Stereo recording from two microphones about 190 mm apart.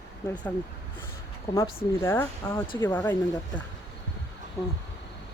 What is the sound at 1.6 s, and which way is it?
Speech, 15° left (ahead or behind).